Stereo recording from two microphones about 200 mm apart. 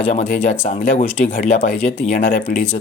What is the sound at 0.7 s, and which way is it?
Speech, 40° left (ahead or behind).